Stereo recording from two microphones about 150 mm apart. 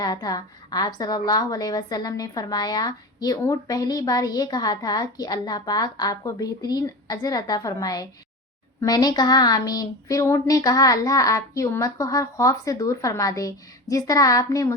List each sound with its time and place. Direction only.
0.0 s a woman's voice: 25° left (ahead or behind)